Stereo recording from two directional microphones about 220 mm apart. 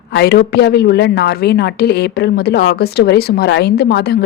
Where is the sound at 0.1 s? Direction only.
50° left (ahead or behind).